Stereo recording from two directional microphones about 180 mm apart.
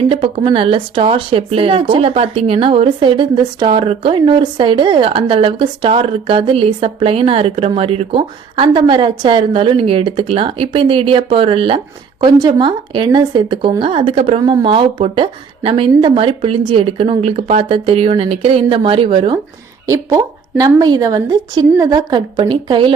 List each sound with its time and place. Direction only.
0.1 s a woman's voice: 30° right (ahead or behind)
19.9 s a woman's voice: 15° right (ahead or behind)